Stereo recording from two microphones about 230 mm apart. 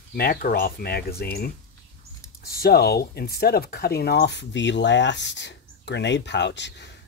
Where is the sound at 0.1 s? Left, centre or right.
Left.